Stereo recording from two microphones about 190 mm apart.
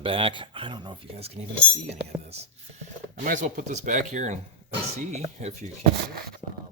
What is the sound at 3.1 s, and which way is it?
Speech, 45° right (ahead or behind).